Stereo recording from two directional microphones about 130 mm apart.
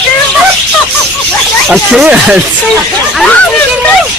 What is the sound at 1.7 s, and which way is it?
Speech, 5° right (ahead or behind).